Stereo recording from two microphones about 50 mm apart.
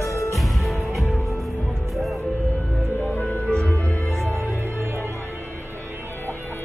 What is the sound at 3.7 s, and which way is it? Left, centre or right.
Music, left.